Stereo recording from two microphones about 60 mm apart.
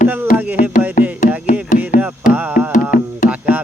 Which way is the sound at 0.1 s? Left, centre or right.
Right.